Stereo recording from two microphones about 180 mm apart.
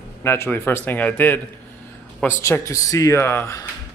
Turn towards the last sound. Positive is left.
turn(degrees=15)  # may be behind; listen again after turning